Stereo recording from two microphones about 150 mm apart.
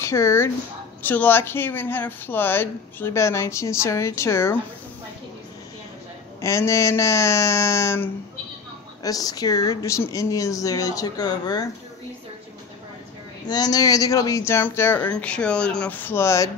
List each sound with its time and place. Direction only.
0.0 s speech: 20° left (ahead or behind)
6.4 s speech: 20° left (ahead or behind)
13.5 s speech: 25° left (ahead or behind)